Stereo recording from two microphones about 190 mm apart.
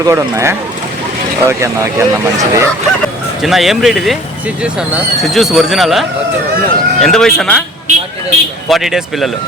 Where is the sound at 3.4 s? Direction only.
Centre (ahead or behind).